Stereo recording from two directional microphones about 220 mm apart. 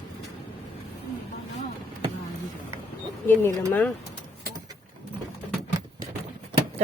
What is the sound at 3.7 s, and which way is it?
Speech, 10° left (ahead or behind).